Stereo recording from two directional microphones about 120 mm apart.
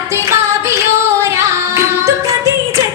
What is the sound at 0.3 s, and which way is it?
Music, 25° right (ahead or behind).